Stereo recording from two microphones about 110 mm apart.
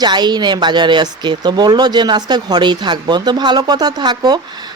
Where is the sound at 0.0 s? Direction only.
40° right (ahead or behind).